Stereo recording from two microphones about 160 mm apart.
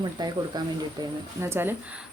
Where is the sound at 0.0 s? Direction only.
25° right (ahead or behind).